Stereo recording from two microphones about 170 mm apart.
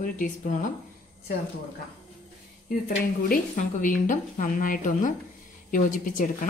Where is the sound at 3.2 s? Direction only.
55° left (ahead or behind).